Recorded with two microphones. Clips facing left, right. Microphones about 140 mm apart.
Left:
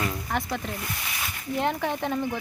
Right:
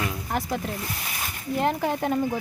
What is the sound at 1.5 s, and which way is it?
Speech, 5° right (ahead or behind).